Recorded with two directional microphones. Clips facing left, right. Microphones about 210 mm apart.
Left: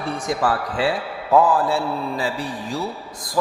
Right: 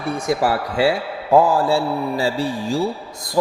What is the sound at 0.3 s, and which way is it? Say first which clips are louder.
A man's voice: right 3 dB; 25° right (ahead or behind).